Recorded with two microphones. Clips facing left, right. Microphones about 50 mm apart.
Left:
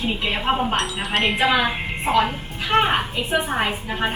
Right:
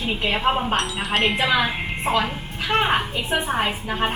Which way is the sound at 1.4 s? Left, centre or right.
Left.